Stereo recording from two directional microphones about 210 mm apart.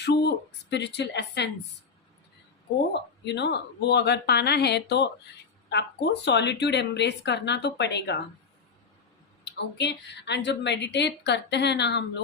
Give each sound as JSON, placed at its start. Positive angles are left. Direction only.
{"t": 0.7, "sound": "a woman's voice", "side_deg": 55}
{"t": 2.9, "sound": "speech", "side_deg": 55}
{"t": 9.4, "sound": "a woman's voice", "side_deg": 55}